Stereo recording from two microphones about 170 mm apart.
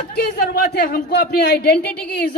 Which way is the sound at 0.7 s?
65° left (ahead or behind).